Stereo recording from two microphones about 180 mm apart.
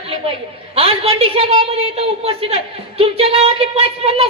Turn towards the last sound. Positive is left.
turn(degrees=-30)  # may be behind; listen again after turning